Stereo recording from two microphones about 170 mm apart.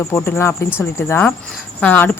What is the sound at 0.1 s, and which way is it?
Speech, 15° left (ahead or behind).